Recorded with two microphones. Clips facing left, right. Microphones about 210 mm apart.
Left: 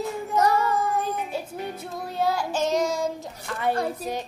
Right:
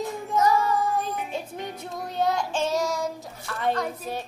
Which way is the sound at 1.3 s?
5° left (ahead or behind).